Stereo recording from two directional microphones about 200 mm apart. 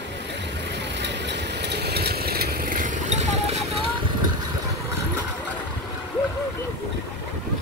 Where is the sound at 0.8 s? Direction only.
60° right (ahead or behind); by 3.8 s 35° right (ahead or behind).